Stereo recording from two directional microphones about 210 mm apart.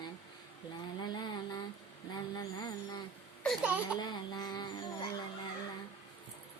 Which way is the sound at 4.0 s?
20° left (ahead or behind).